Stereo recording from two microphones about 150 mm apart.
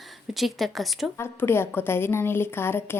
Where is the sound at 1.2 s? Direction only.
15° left (ahead or behind).